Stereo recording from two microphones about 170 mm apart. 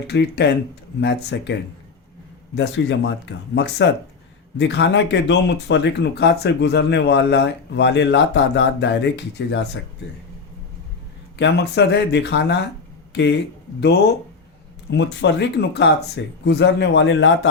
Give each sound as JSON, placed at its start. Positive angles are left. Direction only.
{"t": 0.1, "sound": "speech", "side_deg": 85}
{"t": 2.6, "sound": "speech", "side_deg": 90}
{"t": 11.3, "sound": "speech", "side_deg": 85}
{"t": 14.8, "sound": "speech", "side_deg": 90}